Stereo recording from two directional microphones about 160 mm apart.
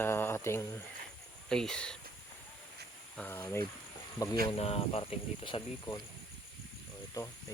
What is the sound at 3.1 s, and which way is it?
Speech, 10° left (ahead or behind).